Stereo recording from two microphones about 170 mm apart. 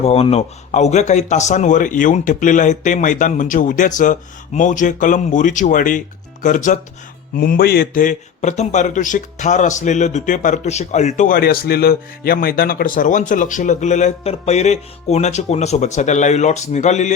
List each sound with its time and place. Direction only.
0.0 s a man's voice: 35° left (ahead or behind)
7.3 s a man's voice: 65° left (ahead or behind); by 17.2 s 45° left (ahead or behind)